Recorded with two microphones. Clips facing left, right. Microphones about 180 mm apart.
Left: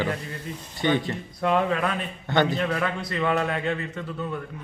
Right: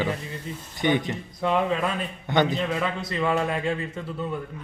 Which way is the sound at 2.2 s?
15° right (ahead or behind).